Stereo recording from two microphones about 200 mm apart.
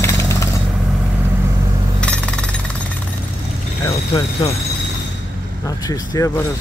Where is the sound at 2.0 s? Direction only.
5° left (ahead or behind).